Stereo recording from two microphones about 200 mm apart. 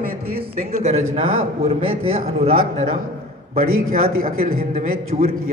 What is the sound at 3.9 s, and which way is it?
Speech, 45° right (ahead or behind).